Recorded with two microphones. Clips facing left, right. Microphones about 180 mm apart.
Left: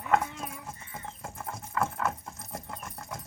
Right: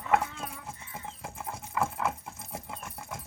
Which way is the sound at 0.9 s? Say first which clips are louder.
Even; 10° right (ahead or behind).